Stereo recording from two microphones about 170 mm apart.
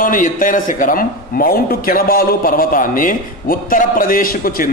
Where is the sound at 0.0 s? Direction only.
50° left (ahead or behind).